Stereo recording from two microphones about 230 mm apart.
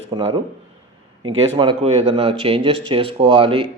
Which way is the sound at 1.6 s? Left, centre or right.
Right.